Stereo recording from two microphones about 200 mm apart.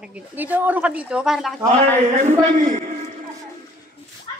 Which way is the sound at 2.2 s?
35° right (ahead or behind).